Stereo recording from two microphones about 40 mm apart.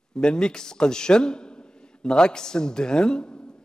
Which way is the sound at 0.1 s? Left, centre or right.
Left.